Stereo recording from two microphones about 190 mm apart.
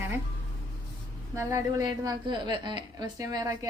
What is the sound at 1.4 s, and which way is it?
A woman's voice, 15° right (ahead or behind).